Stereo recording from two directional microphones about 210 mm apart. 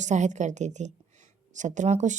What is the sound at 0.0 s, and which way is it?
A woman's voice, 35° right (ahead or behind).